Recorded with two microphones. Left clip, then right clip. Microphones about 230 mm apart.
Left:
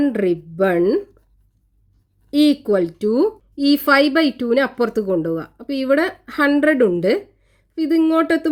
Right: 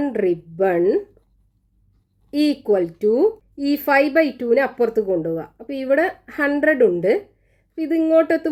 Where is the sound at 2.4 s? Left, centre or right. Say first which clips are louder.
Right 1 dB; left.